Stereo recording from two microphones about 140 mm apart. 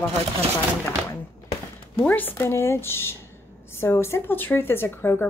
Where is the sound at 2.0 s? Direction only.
15° left (ahead or behind).